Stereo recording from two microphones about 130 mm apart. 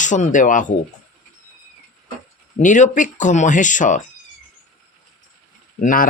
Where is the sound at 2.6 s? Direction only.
80° left.